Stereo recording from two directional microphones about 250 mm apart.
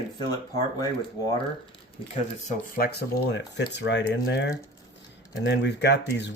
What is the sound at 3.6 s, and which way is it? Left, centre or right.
Speech, left.